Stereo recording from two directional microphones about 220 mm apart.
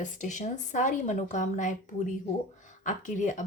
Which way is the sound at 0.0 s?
35° left (ahead or behind).